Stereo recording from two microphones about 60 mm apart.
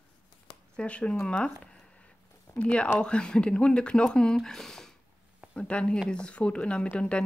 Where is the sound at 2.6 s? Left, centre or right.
Left.